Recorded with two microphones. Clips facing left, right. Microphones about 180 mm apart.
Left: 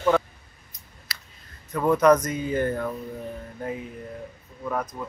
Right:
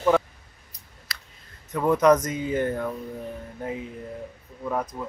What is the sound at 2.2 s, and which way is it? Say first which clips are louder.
Speech: even; 20° right (ahead or behind).